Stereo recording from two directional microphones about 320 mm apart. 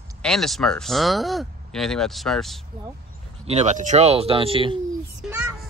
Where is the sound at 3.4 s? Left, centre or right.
Right.